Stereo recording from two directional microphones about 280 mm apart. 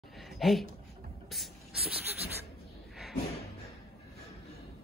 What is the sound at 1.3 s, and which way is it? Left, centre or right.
Spray, centre.